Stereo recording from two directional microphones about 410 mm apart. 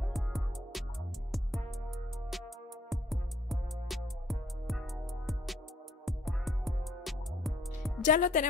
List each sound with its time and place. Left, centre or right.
0.0 s music: centre
8.0 s speech: centre